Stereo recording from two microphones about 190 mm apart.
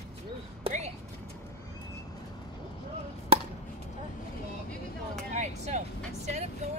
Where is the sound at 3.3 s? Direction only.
30° right (ahead or behind).